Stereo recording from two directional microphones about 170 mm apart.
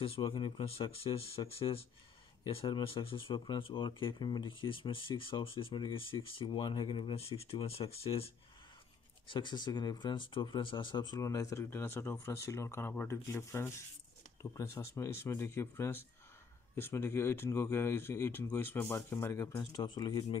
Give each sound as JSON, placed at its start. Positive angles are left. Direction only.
{"t": 0.0, "sound": "speech", "side_deg": 35}
{"t": 9.3, "sound": "speech", "side_deg": 25}